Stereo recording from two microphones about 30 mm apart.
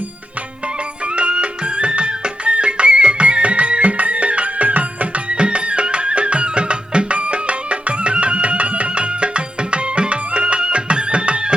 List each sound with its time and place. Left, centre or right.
1.1 s music: right
5.3 s music: right